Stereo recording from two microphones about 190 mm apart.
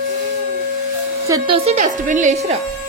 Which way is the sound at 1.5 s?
35° right (ahead or behind).